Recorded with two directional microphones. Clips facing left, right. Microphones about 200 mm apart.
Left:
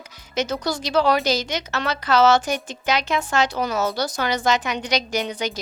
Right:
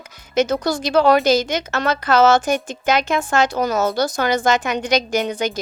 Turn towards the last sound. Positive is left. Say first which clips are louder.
# right 5 dB
turn(degrees=-50)  # may be behind; listen again after turning